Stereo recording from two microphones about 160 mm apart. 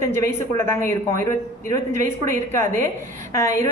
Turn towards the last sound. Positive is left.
turn(degrees=15)  # may be behind; listen again after turning